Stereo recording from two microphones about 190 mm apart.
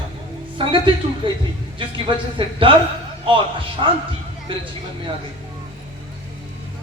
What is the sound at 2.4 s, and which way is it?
A man's voice, 30° right (ahead or behind).